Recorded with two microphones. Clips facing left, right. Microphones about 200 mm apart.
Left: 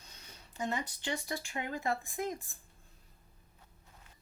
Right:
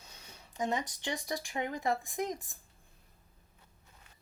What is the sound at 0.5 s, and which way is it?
Speech, 15° right (ahead or behind).